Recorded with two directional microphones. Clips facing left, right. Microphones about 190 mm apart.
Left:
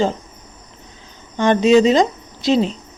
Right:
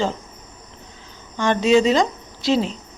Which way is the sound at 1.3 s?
20° left (ahead or behind).